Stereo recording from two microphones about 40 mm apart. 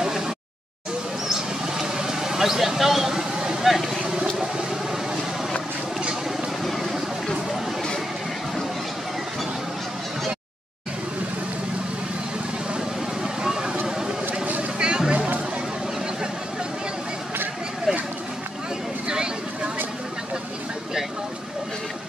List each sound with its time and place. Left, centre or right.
1.3 s vehicle: centre
6.6 s a sound: centre
13.2 s vehicle: centre
13.8 s a sound: centre
14.8 s music: right
19.0 s vehicle: right